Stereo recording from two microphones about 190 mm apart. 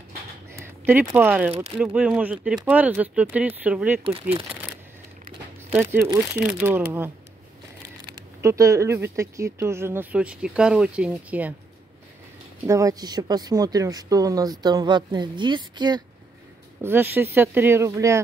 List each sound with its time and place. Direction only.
0.5 s a sound: 10° right (ahead or behind)
1.1 s speech: 10° right (ahead or behind)
5.7 s speech: 10° right (ahead or behind)
8.1 s speech: 15° right (ahead or behind)
12.6 s speech: 15° right (ahead or behind)
16.8 s speech: 10° right (ahead or behind)